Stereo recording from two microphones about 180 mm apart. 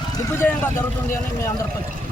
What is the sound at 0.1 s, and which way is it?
Speech, 10° left (ahead or behind).